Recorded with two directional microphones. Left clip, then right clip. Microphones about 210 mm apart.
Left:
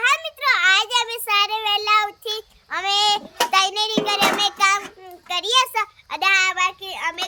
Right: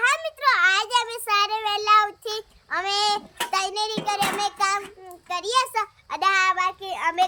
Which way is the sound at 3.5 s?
Centre (ahead or behind).